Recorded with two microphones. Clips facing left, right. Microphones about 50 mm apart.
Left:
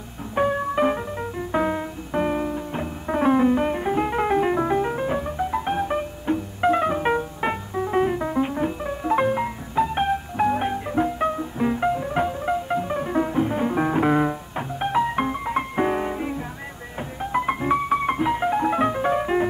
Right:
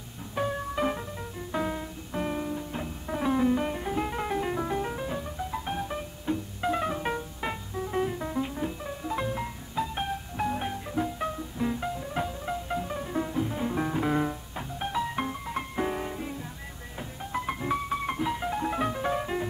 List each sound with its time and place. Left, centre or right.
0.4 s music: left